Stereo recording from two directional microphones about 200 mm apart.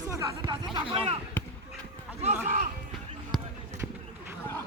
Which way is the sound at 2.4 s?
35° right (ahead or behind).